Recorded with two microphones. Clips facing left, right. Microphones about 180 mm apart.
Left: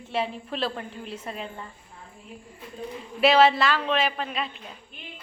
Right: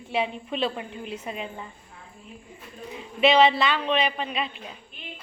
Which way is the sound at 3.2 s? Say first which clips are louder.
Even; 5° left (ahead or behind).